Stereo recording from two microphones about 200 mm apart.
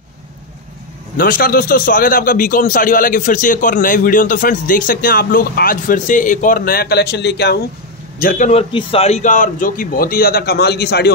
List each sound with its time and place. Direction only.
1.1 s a man's voice: 45° left (ahead or behind)
8.2 s a man's voice: 40° left (ahead or behind)